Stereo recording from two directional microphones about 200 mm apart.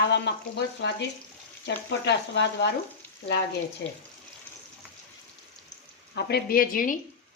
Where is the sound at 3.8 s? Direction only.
55° left (ahead or behind).